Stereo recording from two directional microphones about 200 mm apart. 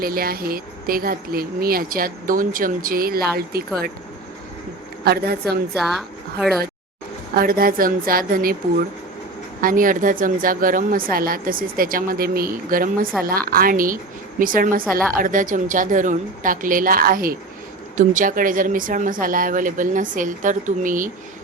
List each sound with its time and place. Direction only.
0.0 s speech: 50° right (ahead or behind)
5.0 s speech: 50° right (ahead or behind)
5.7 s a woman's voice: centre (ahead or behind)
7.3 s speech: 45° right (ahead or behind)